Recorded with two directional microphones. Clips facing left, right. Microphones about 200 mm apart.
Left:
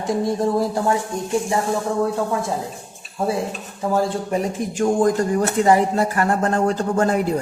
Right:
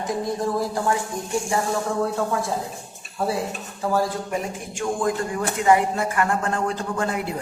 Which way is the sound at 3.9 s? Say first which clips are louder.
Left 4 dB; 25° left (ahead or behind).